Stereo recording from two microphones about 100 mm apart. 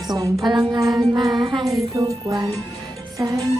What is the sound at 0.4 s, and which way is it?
Music, 50° right (ahead or behind).